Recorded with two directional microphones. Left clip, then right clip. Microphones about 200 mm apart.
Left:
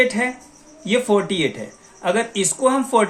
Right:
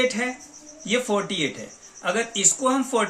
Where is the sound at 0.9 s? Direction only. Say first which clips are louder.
Left 5 dB; 30° left (ahead or behind).